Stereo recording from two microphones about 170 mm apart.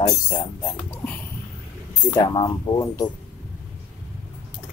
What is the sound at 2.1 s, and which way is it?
Speech, 25° left (ahead or behind).